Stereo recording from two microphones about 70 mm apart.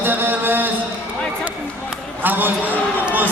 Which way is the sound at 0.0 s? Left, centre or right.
Right.